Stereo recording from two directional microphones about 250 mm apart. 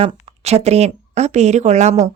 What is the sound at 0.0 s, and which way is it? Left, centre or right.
A woman's voice, right.